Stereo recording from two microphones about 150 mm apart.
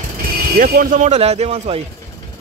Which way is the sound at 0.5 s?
65° right (ahead or behind).